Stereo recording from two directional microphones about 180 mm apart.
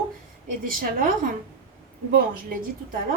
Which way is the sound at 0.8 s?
50° right (ahead or behind).